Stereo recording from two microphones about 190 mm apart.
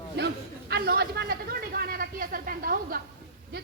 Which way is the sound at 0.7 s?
55° right (ahead or behind).